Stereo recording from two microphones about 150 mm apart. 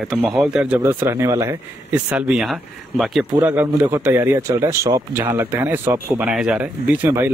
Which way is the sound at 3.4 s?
15° right (ahead or behind).